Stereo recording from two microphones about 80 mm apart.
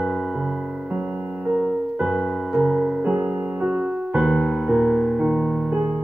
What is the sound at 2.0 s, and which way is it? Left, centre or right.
Music, centre.